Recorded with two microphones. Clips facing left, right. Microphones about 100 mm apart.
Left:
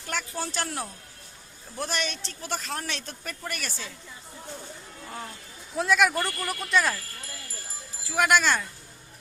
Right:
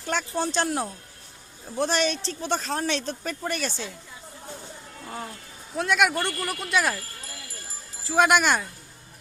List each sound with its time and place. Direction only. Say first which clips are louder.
0.1 s speech: right 6 dB; 25° right (ahead or behind)
5.0 s speech: right 3 dB; 15° right (ahead or behind)
5.7 s speech: even; centre (ahead or behind)
8.0 s speech: right 3 dB; 25° right (ahead or behind)